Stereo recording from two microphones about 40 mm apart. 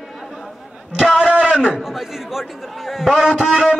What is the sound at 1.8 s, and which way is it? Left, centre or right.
A man's voice, centre.